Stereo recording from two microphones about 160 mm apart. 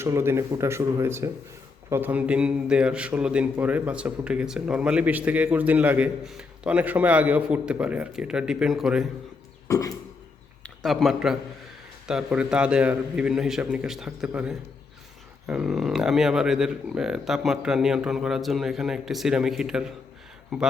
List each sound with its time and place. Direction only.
0.0 s a man's voice: 15° right (ahead or behind)
9.6 s a sound: 20° left (ahead or behind)
10.6 s speech: centre (ahead or behind)